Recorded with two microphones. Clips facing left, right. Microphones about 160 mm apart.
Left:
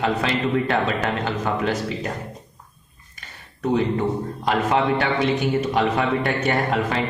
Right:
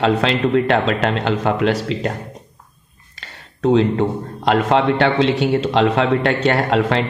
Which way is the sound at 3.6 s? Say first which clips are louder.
Right 6 dB; 80° right.